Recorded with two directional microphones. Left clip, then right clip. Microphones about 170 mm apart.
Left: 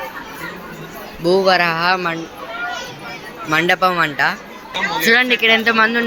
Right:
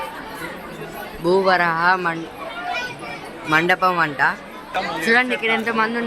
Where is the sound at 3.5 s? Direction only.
10° left (ahead or behind).